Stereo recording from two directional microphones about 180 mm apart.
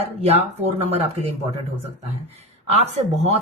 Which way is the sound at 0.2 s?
35° right (ahead or behind).